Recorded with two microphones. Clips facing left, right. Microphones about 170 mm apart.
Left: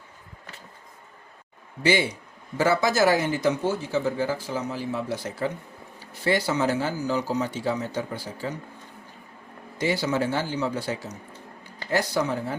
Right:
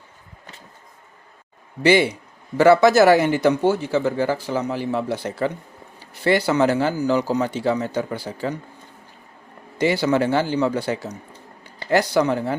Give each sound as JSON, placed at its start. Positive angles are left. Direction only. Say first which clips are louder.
{"t": 1.8, "sound": "speech", "louder": "right 6 dB", "side_deg": -65}
{"t": 9.7, "sound": "speech", "louder": "right 6 dB", "side_deg": -70}